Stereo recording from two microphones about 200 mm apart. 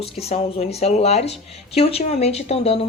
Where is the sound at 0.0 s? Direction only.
30° left (ahead or behind).